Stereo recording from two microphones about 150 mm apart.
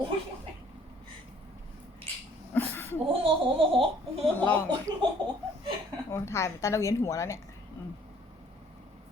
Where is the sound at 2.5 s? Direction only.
15° left (ahead or behind).